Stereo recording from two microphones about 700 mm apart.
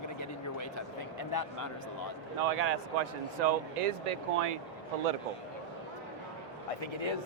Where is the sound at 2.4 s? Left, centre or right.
Right.